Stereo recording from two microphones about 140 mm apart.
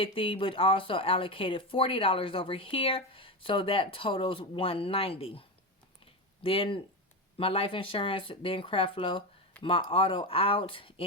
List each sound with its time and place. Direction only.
0.0 s speech: 40° left (ahead or behind)
6.4 s speech: 40° left (ahead or behind)